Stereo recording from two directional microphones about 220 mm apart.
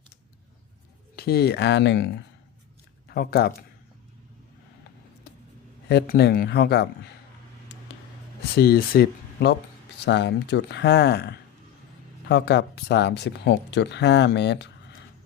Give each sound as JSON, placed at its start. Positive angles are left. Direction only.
{"t": 1.1, "sound": "speech", "side_deg": 45}
{"t": 5.9, "sound": "speech", "side_deg": 50}
{"t": 8.5, "sound": "speech", "side_deg": 45}